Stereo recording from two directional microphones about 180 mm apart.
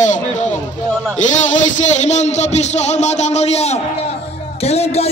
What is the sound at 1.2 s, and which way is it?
A man's voice, 45° left (ahead or behind).